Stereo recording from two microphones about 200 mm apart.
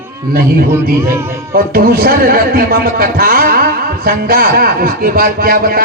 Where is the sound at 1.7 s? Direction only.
50° right (ahead or behind).